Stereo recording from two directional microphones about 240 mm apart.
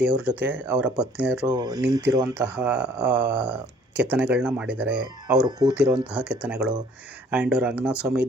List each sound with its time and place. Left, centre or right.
0.2 s speech: centre
1.5 s speech: centre
5.5 s speech: centre
5.7 s speech: centre